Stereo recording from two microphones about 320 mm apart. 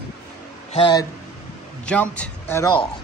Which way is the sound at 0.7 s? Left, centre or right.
Centre.